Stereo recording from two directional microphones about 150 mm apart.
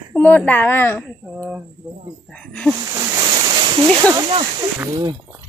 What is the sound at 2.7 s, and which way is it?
Speech, 25° right (ahead or behind).